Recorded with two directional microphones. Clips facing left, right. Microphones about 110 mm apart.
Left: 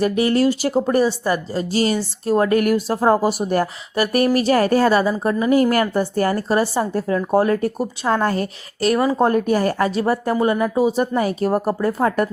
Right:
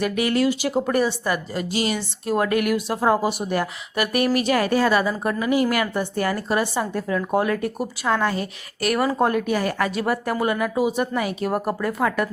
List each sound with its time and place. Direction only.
0.0 s a woman's voice: 30° left (ahead or behind)
8.8 s speech: 25° left (ahead or behind)
9.2 s a woman's voice: 35° left (ahead or behind)